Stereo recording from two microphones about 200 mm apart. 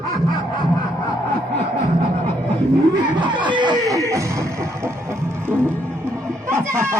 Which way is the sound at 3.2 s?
25° right (ahead or behind).